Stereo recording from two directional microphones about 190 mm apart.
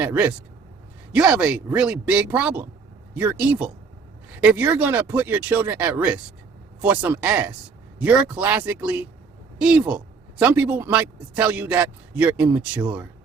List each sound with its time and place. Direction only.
0.0 s speech: 10° right (ahead or behind)